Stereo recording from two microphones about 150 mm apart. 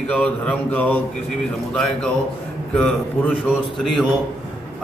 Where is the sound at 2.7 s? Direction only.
10° left (ahead or behind).